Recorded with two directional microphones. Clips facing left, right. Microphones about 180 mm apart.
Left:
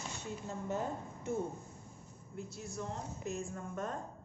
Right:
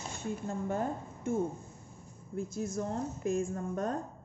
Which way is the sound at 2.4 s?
45° right (ahead or behind).